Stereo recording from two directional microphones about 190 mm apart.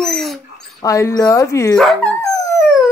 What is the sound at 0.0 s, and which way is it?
Dog, 5° left (ahead or behind).